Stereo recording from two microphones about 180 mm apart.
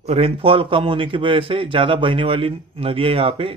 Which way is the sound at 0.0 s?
35° right (ahead or behind).